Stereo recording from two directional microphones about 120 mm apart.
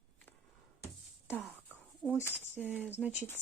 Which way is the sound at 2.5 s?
15° right (ahead or behind).